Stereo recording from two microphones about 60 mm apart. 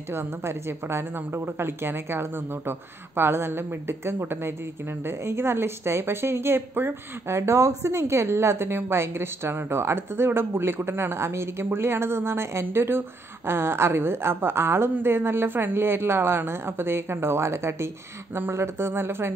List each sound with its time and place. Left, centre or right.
0.1 s a woman's voice: right